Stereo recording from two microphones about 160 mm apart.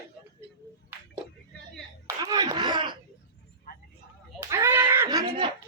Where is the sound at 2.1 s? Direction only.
20° right (ahead or behind).